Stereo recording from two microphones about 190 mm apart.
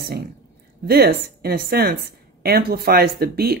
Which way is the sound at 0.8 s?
55° right (ahead or behind).